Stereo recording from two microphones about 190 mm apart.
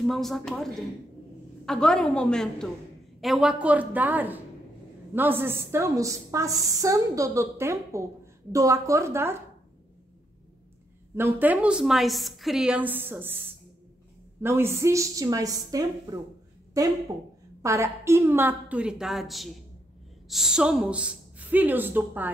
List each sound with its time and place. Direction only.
0.0 s a woman's voice: centre (ahead or behind)
11.1 s a woman's voice: 10° right (ahead or behind)
14.4 s a woman's voice: 15° right (ahead or behind)